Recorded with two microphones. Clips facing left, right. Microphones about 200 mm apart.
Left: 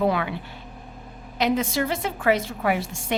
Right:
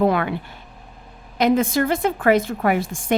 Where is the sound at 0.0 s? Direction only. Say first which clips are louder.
Right 4 dB; 50° right (ahead or behind).